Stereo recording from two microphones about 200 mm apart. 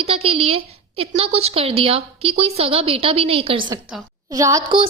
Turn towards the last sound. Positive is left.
turn(degrees=-15)  # may be behind; listen again after turning